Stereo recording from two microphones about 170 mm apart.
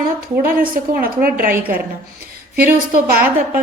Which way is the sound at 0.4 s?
55° right (ahead or behind).